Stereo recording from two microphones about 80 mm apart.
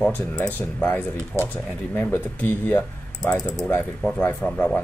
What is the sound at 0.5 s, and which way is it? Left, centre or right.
Speech, left.